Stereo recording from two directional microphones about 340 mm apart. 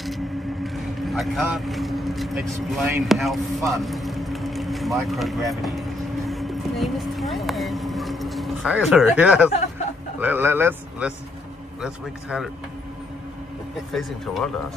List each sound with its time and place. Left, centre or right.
0.7 s vehicle: centre
10.2 s speech: centre
13.9 s speech: centre